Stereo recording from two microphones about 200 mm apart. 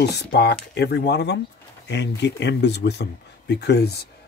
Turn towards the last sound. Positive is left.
turn(degrees=55)  # may be behind; listen again after turning